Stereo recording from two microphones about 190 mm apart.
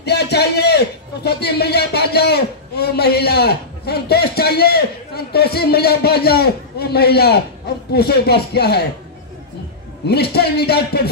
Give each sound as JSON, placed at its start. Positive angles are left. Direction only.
{"t": 0.0, "sound": "a man's voice", "side_deg": 60}
{"t": 10.0, "sound": "a man's voice", "side_deg": 60}